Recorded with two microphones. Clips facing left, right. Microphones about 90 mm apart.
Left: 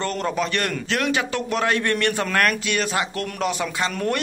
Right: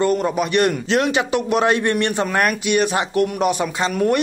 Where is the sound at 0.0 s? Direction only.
10° right (ahead or behind).